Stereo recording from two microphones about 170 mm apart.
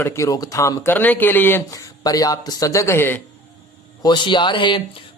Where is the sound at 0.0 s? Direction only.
20° left (ahead or behind).